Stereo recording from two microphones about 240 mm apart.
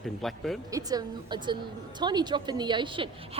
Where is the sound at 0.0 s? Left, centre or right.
Centre.